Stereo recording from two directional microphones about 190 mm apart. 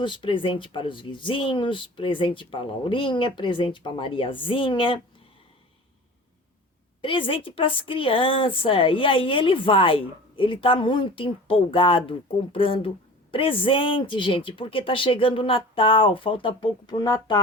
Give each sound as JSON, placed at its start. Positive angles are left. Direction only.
{"t": 0.0, "sound": "a woman's voice", "side_deg": 25}
{"t": 7.0, "sound": "a woman's voice", "side_deg": 25}